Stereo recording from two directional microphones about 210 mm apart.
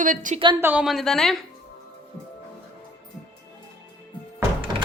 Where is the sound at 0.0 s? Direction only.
40° right (ahead or behind).